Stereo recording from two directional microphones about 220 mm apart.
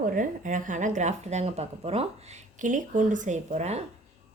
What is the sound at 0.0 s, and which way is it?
A woman's voice, 35° right (ahead or behind).